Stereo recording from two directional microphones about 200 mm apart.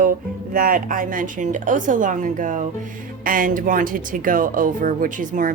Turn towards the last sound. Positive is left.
turn(degrees=-40)  # may be behind; listen again after turning